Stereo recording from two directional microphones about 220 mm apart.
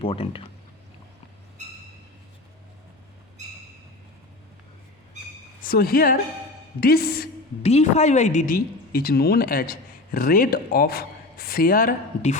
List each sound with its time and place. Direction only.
0.0 s speech: 25° left (ahead or behind)
5.6 s a woman's voice: 45° left (ahead or behind)
7.6 s a woman's voice: 30° left (ahead or behind)